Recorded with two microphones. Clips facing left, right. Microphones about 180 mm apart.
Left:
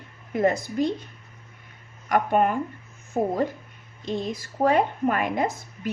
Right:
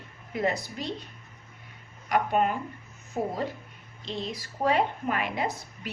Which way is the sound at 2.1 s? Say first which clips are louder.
Left 4 dB; 50° left (ahead or behind).